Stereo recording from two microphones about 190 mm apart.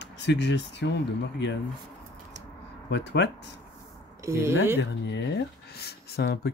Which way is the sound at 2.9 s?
65° left (ahead or behind).